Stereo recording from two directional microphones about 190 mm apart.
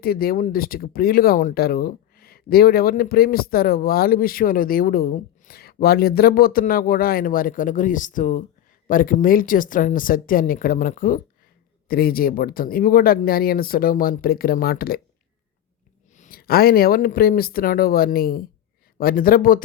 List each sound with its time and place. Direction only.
0.0 s speech: 50° left (ahead or behind)
16.1 s speech: 45° left (ahead or behind)